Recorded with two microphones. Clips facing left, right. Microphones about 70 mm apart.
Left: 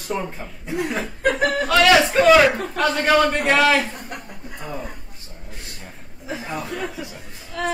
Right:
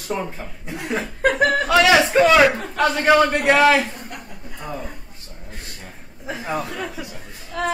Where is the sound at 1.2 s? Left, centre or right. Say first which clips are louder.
Right 2 dB; right.